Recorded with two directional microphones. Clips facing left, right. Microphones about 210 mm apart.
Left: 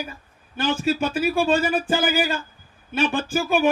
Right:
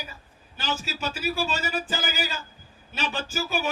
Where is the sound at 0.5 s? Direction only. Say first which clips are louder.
Left 10 dB; 55° left (ahead or behind).